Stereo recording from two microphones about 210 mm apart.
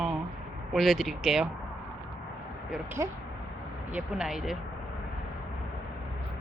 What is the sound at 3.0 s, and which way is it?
Speech, 15° right (ahead or behind).